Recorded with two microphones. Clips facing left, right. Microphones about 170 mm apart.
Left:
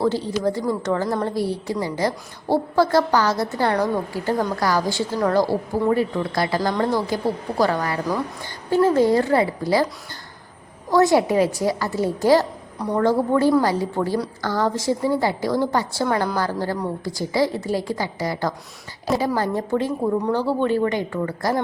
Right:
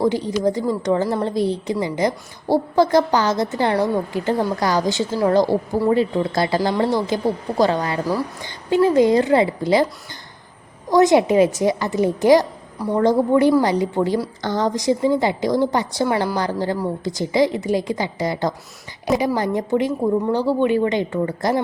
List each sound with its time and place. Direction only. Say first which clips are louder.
0.0 s a woman's voice: right 2 dB; 15° right (ahead or behind)
10.8 s a woman's voice: right 3 dB; 20° right (ahead or behind)